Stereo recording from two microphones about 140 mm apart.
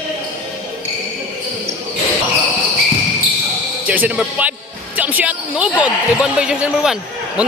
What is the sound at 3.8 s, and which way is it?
Speech, 10° right (ahead or behind).